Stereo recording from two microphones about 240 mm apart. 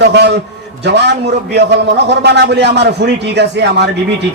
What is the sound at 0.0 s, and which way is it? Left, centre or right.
Speech, right.